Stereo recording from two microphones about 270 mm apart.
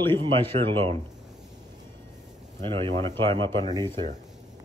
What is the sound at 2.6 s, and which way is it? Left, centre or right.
Speech, centre.